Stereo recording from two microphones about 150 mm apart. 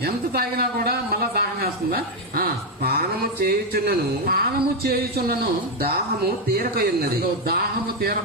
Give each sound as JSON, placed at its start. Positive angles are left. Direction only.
{"t": 0.0, "sound": "a man's voice", "side_deg": -90}
{"t": 6.5, "sound": "a man's voice", "side_deg": -90}